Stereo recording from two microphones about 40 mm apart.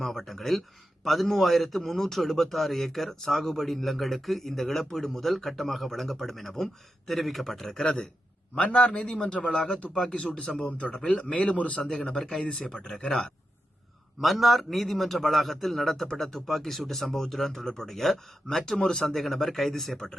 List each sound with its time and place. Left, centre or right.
0.0 s a man's voice: centre
8.6 s speech: left
10.2 s speech: left
10.9 s speech: centre
11.2 s speech: left
11.5 s speech: left
11.8 s speech: centre
14.2 s a man's voice: centre